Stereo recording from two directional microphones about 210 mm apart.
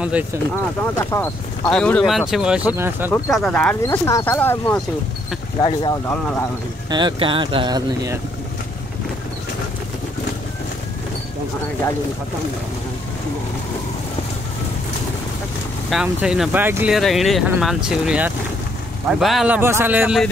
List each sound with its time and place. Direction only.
0.9 s speech: 10° left (ahead or behind); by 3.1 s 10° right (ahead or behind)
3.3 s speech: centre (ahead or behind)
3.8 s speech: 15° left (ahead or behind)
5.6 s speech: 20° left (ahead or behind)
6.9 s speech: 20° right (ahead or behind)
15.9 s speech: 5° right (ahead or behind)